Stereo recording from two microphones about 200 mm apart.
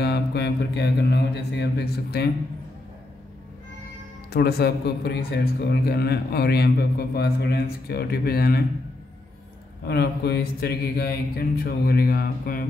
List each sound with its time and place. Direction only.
0.0 s speech: 55° left (ahead or behind)
4.3 s a man's voice: 55° left (ahead or behind)
9.8 s a man's voice: 50° left (ahead or behind)